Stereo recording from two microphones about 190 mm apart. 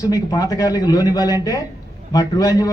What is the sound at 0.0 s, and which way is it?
A man's voice, 20° left (ahead or behind).